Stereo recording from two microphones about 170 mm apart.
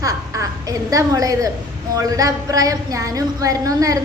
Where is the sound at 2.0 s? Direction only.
20° right (ahead or behind).